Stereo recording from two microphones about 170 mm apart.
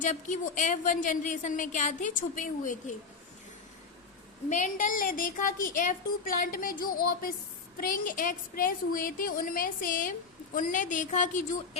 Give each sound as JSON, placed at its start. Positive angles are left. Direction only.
{"t": 0.0, "sound": "a woman's voice", "side_deg": 45}
{"t": 4.4, "sound": "a woman's voice", "side_deg": 45}